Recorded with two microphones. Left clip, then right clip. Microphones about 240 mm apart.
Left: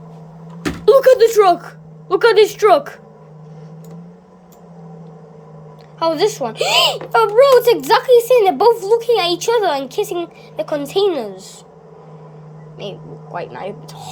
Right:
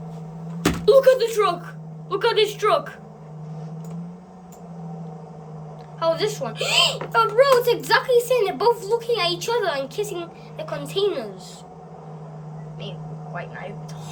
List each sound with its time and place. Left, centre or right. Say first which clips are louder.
0.9 s a woman's voice: left 6 dB; centre
6.0 s speech: left 6 dB; centre
12.8 s a woman's voice: left 8 dB; centre